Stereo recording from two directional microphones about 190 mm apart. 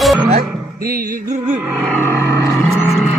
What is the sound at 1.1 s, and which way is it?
Music, 40° right (ahead or behind).